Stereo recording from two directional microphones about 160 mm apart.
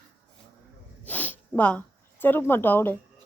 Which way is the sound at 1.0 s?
10° left (ahead or behind).